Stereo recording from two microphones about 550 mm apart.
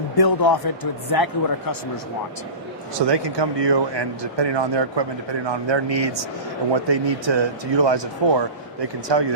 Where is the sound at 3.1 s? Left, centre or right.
Right.